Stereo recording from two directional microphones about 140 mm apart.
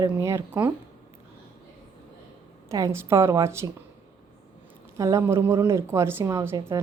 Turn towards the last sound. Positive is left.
turn(degrees=-25)  # may be behind; listen again after turning